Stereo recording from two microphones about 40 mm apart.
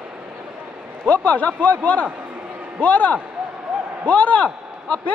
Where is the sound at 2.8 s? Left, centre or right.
Left.